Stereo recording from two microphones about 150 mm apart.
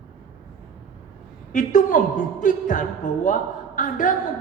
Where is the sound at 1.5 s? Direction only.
60° left (ahead or behind).